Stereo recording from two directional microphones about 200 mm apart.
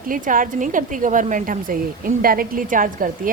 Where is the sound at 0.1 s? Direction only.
40° right (ahead or behind).